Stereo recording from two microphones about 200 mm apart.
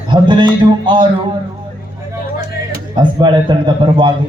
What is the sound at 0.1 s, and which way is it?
Music, 25° right (ahead or behind).